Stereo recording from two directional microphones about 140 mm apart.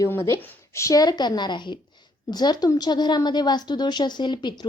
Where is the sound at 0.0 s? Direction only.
20° left (ahead or behind).